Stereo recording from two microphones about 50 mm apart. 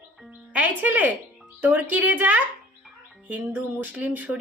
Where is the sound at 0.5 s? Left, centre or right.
Right.